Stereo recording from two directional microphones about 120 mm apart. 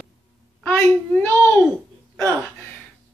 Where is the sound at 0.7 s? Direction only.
15° left (ahead or behind).